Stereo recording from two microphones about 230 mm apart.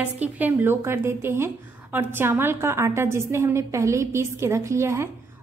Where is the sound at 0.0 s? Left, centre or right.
Centre.